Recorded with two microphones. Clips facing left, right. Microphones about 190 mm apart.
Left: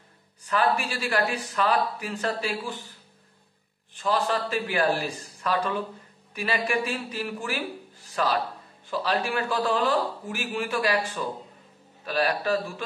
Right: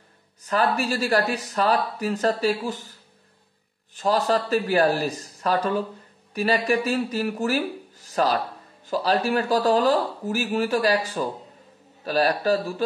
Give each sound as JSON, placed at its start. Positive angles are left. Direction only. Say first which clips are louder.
{"t": 0.4, "sound": "speech", "louder": "right 2 dB", "side_deg": -40}
{"t": 3.9, "sound": "speech", "louder": "right 4 dB", "side_deg": -40}